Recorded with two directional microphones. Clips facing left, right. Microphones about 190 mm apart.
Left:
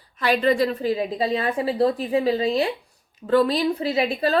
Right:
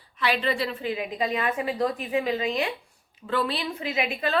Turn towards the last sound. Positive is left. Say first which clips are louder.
# left 6 dB
turn(degrees=35)  # may be behind; listen again after turning